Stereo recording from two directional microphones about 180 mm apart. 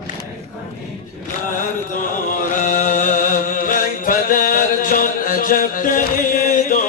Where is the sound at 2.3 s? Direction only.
45° left (ahead or behind).